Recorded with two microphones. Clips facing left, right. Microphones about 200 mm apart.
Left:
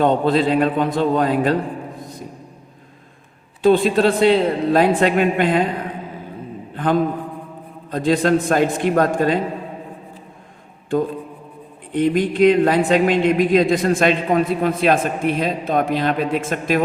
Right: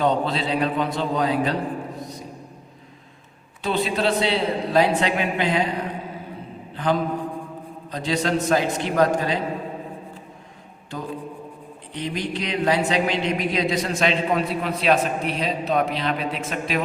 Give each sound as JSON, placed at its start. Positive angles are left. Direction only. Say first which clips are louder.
{"t": 0.0, "sound": "speech", "louder": "left 6 dB", "side_deg": 50}
{"t": 2.0, "sound": "music", "louder": "even", "side_deg": 50}
{"t": 3.6, "sound": "speech", "louder": "left 9 dB", "side_deg": 50}
{"t": 6.7, "sound": "a man's voice", "louder": "left 4 dB", "side_deg": 50}
{"t": 11.9, "sound": "speech", "louder": "left 10 dB", "side_deg": 50}